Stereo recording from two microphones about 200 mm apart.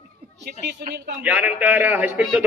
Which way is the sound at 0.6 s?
50° right (ahead or behind).